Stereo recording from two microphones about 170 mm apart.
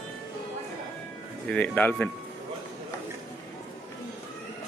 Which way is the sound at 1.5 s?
10° left (ahead or behind).